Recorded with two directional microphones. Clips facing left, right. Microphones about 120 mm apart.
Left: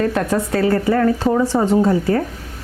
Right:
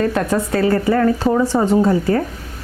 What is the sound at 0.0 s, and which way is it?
A woman's voice, 20° right (ahead or behind).